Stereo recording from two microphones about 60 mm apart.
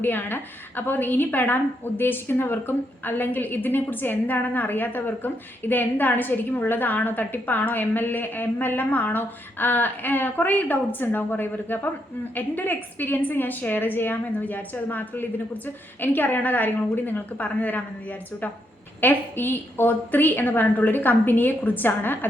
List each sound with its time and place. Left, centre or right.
0.0 s a woman's voice: left
19.0 s a woman's voice: left